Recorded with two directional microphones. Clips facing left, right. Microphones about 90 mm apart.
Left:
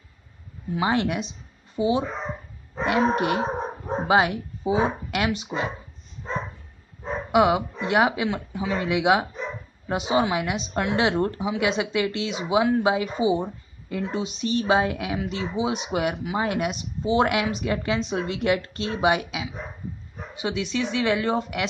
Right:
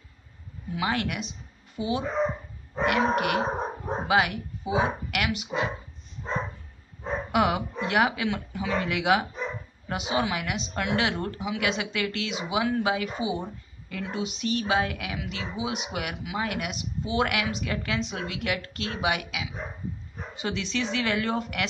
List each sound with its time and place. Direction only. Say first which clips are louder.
0.7 s a woman's voice: left 5 dB; 25° left (ahead or behind)
7.3 s a woman's voice: left 5 dB; 15° left (ahead or behind)
20.4 s speech: left 3 dB; 15° left (ahead or behind)